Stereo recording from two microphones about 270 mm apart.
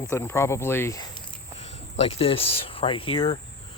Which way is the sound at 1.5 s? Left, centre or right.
Left.